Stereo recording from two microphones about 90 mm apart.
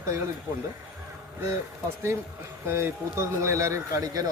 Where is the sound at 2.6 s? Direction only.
30° right (ahead or behind).